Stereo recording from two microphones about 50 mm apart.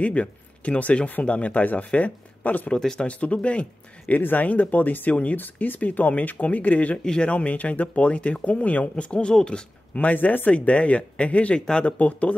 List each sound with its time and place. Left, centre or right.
0.0 s speech: left
2.7 s speech: centre
4.2 s speech: left; by 9.7 s centre
9.9 s speech: left